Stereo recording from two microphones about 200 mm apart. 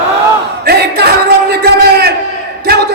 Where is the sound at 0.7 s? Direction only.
50° right (ahead or behind).